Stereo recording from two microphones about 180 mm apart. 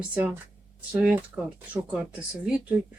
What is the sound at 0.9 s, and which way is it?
Speech, 5° right (ahead or behind).